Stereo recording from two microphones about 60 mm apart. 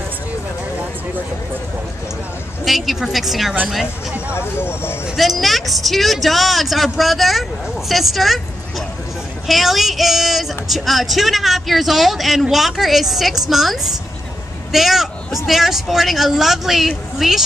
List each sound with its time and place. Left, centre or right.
2.6 s a woman's voice: centre
4.3 s speech: left
5.1 s speech: centre